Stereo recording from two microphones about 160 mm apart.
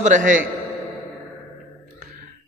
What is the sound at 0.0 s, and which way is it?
Speech, 55° right (ahead or behind).